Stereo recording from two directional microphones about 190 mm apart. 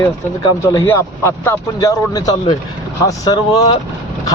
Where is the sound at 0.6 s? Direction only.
15° left (ahead or behind).